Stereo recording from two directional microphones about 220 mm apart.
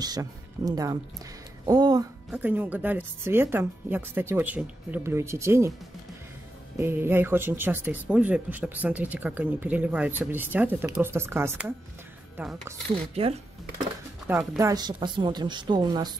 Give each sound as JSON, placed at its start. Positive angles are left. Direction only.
{"t": 0.0, "sound": "speech", "side_deg": -15}
{"t": 6.8, "sound": "speech", "side_deg": -10}
{"t": 13.1, "sound": "a woman's voice", "side_deg": -25}
{"t": 14.3, "sound": "a woman's voice", "side_deg": -10}